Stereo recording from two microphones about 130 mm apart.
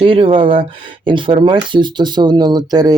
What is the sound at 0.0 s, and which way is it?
Speech, 45° right (ahead or behind).